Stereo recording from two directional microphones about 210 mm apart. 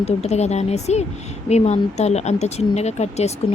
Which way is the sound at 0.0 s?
30° left (ahead or behind).